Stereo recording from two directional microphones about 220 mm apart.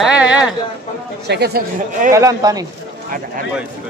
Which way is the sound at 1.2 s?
50° right (ahead or behind).